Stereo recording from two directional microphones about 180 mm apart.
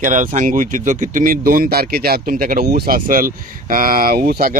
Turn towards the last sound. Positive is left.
turn(degrees=-55)  # may be behind; listen again after turning